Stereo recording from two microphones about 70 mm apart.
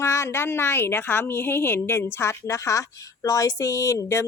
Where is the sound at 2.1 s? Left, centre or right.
Left.